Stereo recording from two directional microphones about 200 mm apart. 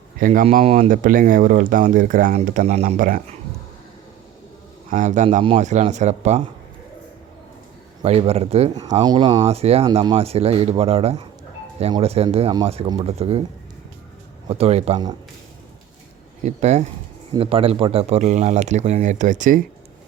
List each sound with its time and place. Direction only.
0.2 s speech: 45° right (ahead or behind)
4.9 s speech: 40° right (ahead or behind)
8.0 s speech: 30° right (ahead or behind)
8.7 s speech: 20° right (ahead or behind)
14.4 s speech: 30° right (ahead or behind)
16.4 s speech: 35° right (ahead or behind)